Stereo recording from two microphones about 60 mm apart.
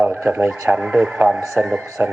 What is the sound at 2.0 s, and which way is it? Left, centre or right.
Speech, right.